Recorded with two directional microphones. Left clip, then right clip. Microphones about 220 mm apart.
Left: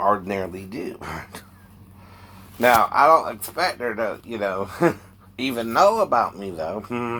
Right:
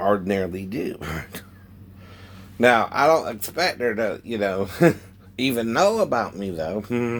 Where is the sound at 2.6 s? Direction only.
40° right (ahead or behind).